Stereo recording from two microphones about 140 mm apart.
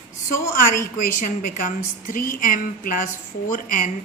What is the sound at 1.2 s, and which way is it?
A woman's voice, 65° left (ahead or behind).